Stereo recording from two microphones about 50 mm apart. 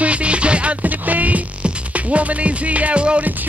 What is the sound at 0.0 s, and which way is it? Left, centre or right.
Music, right.